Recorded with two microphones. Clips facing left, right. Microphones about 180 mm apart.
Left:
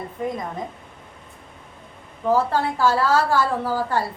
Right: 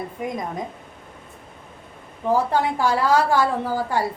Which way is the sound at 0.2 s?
10° right (ahead or behind).